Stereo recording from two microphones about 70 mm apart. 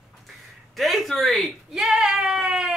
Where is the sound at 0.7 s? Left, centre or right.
Centre.